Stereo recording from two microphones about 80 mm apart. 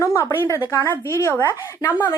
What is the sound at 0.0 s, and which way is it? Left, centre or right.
Speech, left.